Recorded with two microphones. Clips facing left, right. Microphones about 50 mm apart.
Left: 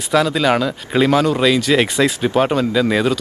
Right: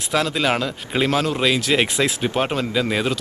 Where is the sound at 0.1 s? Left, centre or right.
Centre.